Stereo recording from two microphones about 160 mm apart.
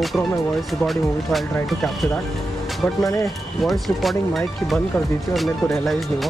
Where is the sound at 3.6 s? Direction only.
Centre (ahead or behind).